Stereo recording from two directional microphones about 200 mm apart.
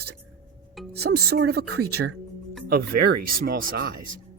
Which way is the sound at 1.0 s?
50° right (ahead or behind).